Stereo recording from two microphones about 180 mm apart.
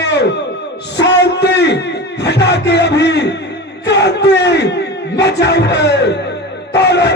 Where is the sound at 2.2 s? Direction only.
70° left (ahead or behind).